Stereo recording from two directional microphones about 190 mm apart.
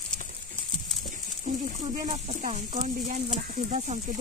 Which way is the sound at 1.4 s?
35° right (ahead or behind).